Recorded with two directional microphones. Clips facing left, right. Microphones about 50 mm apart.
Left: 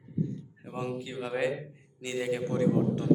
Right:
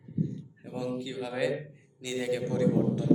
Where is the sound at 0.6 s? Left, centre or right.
Left.